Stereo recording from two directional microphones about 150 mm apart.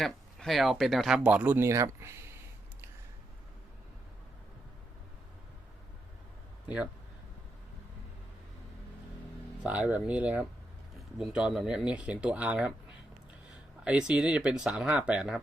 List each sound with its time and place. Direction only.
0.0 s speech: centre (ahead or behind); by 2.3 s 20° right (ahead or behind)
9.6 s speech: 10° right (ahead or behind)
13.8 s speech: 5° right (ahead or behind)